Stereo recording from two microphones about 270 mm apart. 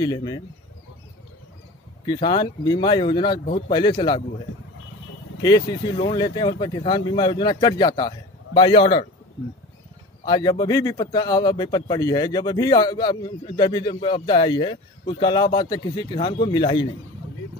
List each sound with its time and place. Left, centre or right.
0.0 s a man's voice: centre
2.0 s a man's voice: centre
3.4 s a man's voice: left
3.7 s a man's voice: centre
5.4 s a man's voice: centre
10.2 s a man's voice: centre